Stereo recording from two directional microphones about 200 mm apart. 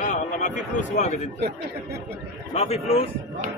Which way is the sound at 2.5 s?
30° left (ahead or behind).